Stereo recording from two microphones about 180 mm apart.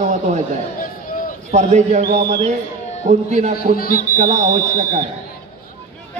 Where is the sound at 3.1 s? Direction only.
40° right (ahead or behind).